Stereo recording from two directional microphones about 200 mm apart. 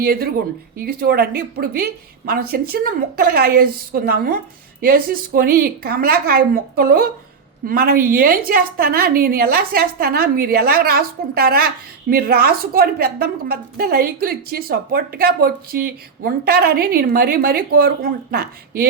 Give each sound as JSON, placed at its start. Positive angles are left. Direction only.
{"t": 0.0, "sound": "a woman's voice", "side_deg": -50}